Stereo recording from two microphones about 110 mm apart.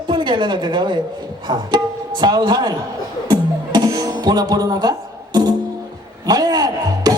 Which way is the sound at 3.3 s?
40° right (ahead or behind).